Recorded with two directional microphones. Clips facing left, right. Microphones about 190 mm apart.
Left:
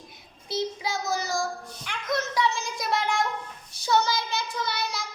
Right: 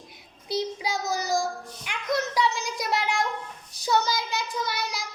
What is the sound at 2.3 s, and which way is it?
Speech, 10° right (ahead or behind).